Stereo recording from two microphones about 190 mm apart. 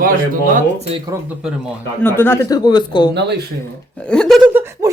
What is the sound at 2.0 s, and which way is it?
Speech, 10° left (ahead or behind).